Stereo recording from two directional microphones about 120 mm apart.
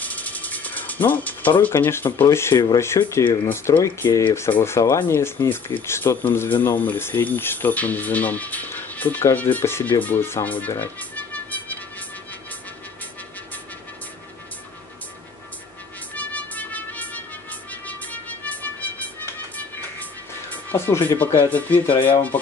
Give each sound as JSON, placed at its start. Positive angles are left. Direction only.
{"t": 0.0, "sound": "music", "side_deg": 15}
{"t": 1.6, "sound": "speech", "side_deg": 20}
{"t": 2.5, "sound": "speech", "side_deg": 35}
{"t": 3.3, "sound": "speech", "side_deg": 20}
{"t": 16.2, "sound": "music", "side_deg": 15}
{"t": 22.0, "sound": "speech", "side_deg": 15}